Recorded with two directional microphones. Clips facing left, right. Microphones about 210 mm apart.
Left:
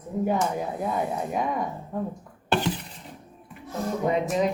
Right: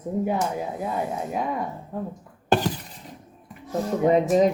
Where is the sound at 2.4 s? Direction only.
40° right (ahead or behind).